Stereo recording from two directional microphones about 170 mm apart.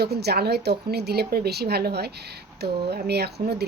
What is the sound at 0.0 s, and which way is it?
Speech, 70° right (ahead or behind).